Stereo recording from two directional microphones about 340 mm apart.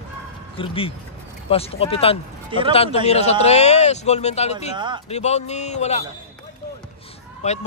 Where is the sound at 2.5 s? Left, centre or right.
Centre.